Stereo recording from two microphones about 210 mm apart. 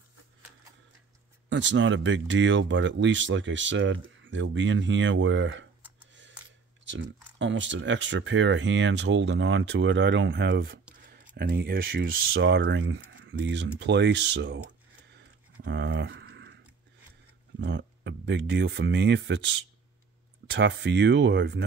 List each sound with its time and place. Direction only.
1.5 s speech: 60° right (ahead or behind)
6.8 s speech: 60° right (ahead or behind)
15.1 s a sound: 55° right (ahead or behind)
17.6 s speech: 55° right (ahead or behind)